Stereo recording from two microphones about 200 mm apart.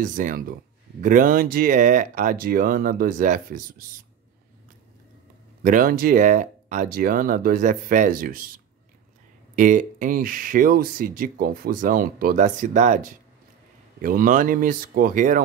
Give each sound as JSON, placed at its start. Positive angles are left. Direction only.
{"t": 0.0, "sound": "speech", "side_deg": -40}
{"t": 5.6, "sound": "speech", "side_deg": -40}
{"t": 9.6, "sound": "speech", "side_deg": -40}
{"t": 14.0, "sound": "speech", "side_deg": -40}